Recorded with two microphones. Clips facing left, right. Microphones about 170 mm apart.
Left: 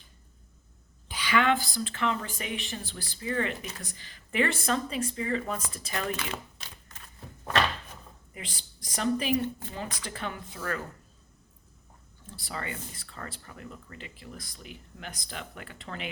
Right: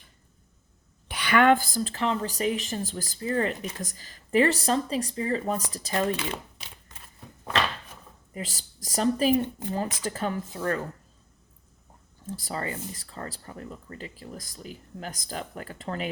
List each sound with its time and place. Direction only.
1.0 s speech: 65° right (ahead or behind); by 6.4 s 30° right (ahead or behind)
8.3 s a woman's voice: 40° right (ahead or behind)
9.3 s a woman's voice: 20° right (ahead or behind)
9.7 s speech: 40° right (ahead or behind)
12.2 s speech: 40° right (ahead or behind)